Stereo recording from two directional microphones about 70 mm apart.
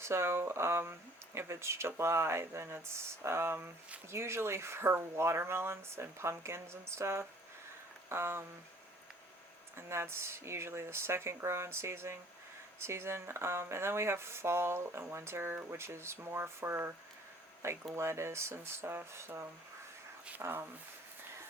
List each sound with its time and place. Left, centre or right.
0.0 s speech: right
9.7 s speech: right
17.9 s speech: right